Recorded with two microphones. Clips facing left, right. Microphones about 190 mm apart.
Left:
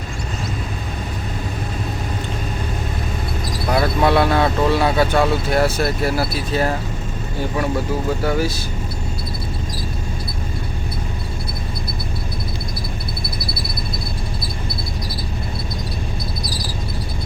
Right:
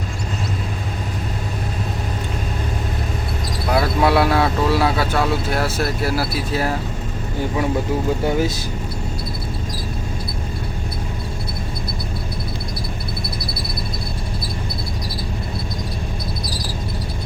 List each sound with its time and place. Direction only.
3.7 s speech: 5° right (ahead or behind)
8.2 s speech: 20° right (ahead or behind)